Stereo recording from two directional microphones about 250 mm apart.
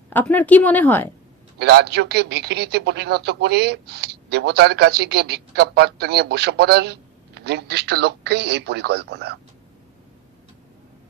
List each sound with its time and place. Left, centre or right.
0.1 s speech: centre
1.6 s speech: right